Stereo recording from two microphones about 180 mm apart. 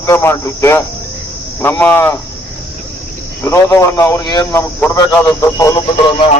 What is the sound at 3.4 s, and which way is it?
Speech, 15° left (ahead or behind).